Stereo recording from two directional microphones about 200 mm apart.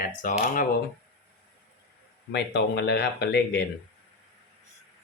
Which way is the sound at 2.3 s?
55° left (ahead or behind).